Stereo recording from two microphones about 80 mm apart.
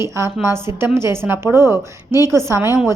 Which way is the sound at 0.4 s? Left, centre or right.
Right.